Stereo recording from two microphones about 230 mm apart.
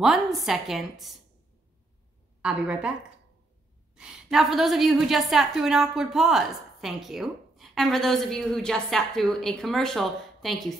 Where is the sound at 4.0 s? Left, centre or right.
Centre.